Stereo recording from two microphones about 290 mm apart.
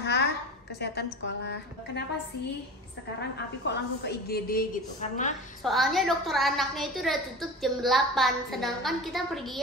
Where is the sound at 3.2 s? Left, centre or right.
Left.